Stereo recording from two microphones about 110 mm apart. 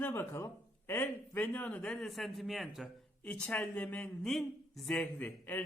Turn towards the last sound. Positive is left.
turn(degrees=15)  # may be behind; listen again after turning